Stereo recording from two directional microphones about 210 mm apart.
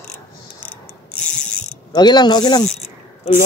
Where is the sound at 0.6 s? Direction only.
5° left (ahead or behind).